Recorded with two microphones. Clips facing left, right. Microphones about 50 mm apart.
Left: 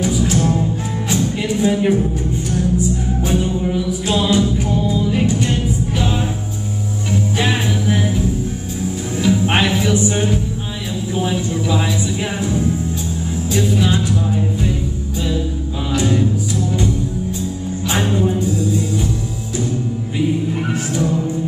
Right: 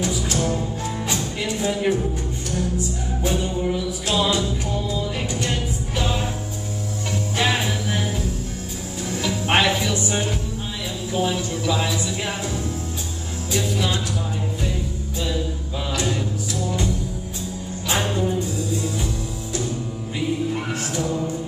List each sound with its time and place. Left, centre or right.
0.0 s music: centre
4.2 s music: centre
7.3 s music: centre
9.2 s music: centre
11.1 s a sound: centre
12.4 s music: left